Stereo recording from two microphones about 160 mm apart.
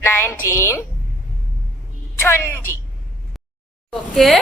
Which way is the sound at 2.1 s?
15° left (ahead or behind).